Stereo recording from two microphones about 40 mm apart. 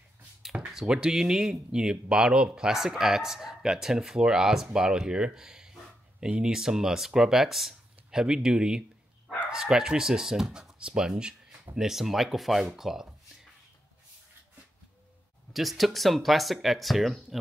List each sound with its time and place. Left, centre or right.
0.8 s speech: centre
15.5 s speech: centre